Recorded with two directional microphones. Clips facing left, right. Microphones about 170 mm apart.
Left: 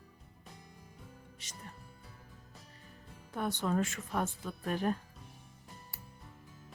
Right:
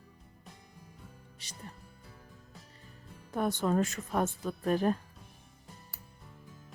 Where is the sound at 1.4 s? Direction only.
35° right (ahead or behind).